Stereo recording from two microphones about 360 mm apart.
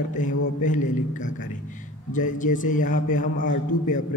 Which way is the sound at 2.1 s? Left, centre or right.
Left.